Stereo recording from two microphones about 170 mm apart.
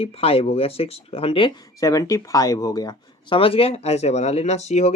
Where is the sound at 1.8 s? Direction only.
20° left (ahead or behind); by 4.9 s 40° left (ahead or behind).